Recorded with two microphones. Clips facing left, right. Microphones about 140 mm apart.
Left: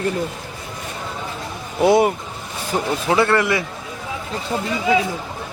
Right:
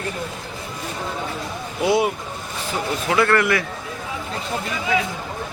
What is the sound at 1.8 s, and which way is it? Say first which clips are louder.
Speech: left 4 dB; 50° left (ahead or behind).